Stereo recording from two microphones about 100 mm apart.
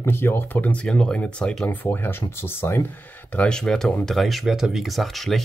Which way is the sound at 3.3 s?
10° left (ahead or behind).